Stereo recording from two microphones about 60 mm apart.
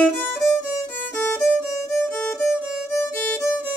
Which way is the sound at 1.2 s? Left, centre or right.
Left.